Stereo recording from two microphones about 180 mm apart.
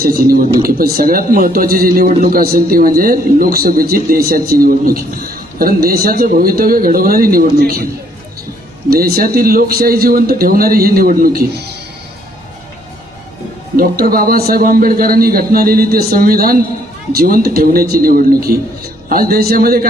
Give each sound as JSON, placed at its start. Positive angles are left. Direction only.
{"t": 0.0, "sound": "a man's voice", "side_deg": -55}
{"t": 8.9, "sound": "a man's voice", "side_deg": -55}
{"t": 13.7, "sound": "a man's voice", "side_deg": -55}